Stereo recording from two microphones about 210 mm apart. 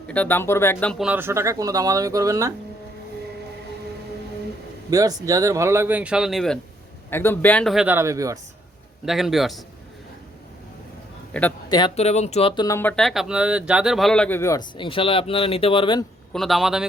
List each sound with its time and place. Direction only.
0.1 s speech: 10° left (ahead or behind); by 2.5 s 15° right (ahead or behind)
4.9 s a man's voice: 15° right (ahead or behind)
9.0 s a man's voice: centre (ahead or behind)
11.3 s a man's voice: 5° left (ahead or behind)
11.7 s speech: 25° left (ahead or behind)
16.3 s a man's voice: centre (ahead or behind)